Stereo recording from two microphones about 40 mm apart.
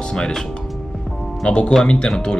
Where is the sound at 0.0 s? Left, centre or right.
Centre.